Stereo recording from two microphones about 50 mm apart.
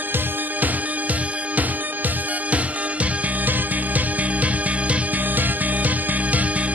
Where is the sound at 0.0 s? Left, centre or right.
Right.